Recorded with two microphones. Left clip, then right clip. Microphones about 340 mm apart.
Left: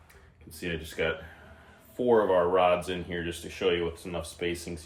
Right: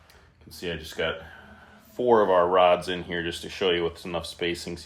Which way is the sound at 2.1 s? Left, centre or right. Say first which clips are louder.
Right 3 dB; right.